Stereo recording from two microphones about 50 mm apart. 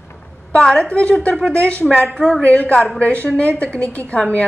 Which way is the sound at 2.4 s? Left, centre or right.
Left.